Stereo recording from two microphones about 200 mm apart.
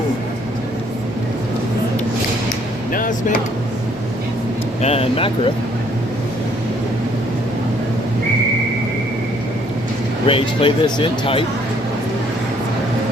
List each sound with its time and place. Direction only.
2.9 s a sound: 45° left (ahead or behind)
4.8 s speech: 30° left (ahead or behind)
10.2 s speech: 25° left (ahead or behind)